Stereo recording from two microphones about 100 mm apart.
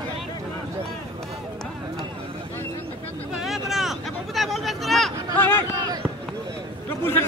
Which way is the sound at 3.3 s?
Centre (ahead or behind).